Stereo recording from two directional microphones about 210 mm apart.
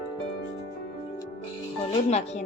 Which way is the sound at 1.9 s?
30° left (ahead or behind).